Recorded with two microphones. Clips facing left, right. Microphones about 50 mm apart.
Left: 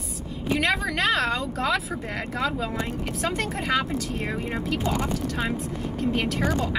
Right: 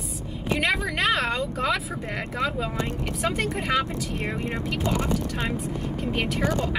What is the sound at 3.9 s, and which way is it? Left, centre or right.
Speech, centre.